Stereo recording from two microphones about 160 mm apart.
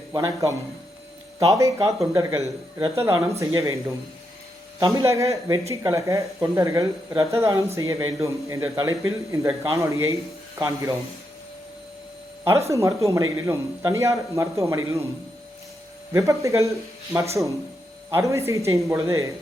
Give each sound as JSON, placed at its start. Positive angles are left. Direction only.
{"t": 0.1, "sound": "speech", "side_deg": -20}
{"t": 4.8, "sound": "speech", "side_deg": -20}
{"t": 12.5, "sound": "speech", "side_deg": -20}
{"t": 16.1, "sound": "speech", "side_deg": -20}